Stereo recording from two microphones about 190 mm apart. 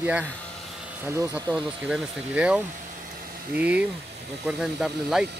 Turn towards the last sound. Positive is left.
turn(degrees=-5)  # may be behind; listen again after turning